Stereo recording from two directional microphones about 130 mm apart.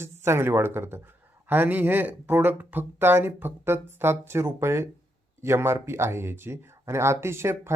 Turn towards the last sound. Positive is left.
turn(degrees=-20)  # may be behind; listen again after turning